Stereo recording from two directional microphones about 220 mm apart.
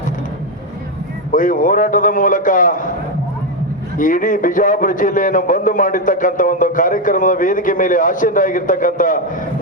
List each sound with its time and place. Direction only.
1.3 s a man's voice: 35° left (ahead or behind)
3.9 s a man's voice: 35° left (ahead or behind)